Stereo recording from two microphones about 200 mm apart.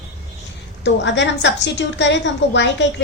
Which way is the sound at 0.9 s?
60° left (ahead or behind).